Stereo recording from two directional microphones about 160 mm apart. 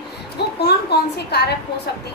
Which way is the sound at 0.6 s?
90° left.